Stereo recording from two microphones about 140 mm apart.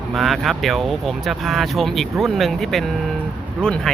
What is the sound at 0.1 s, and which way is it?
Speech, centre (ahead or behind).